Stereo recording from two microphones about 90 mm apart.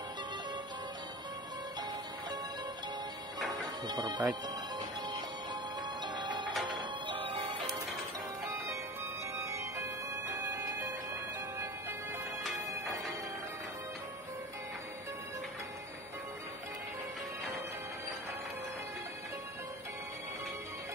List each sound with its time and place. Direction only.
3.8 s speech: 50° right (ahead or behind)
4.7 s music: 55° right (ahead or behind)
6.8 s music: 70° right (ahead or behind)
9.4 s music: 30° right (ahead or behind)